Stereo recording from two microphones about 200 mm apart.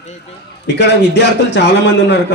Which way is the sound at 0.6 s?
60° left (ahead or behind).